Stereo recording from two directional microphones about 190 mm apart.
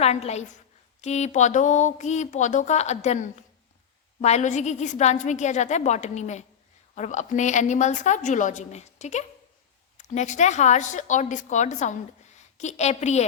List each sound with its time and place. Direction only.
0.0 s a woman's voice: 35° left (ahead or behind)